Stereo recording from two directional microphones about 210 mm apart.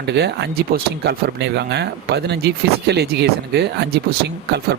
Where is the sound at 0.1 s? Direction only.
55° right (ahead or behind).